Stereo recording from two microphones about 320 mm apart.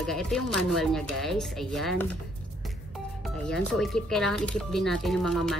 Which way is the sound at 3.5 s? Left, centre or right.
Centre.